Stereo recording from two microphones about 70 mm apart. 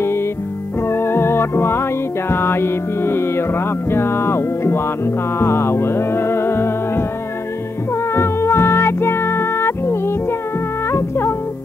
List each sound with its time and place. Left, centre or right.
0.8 s music: left
8.1 s music: left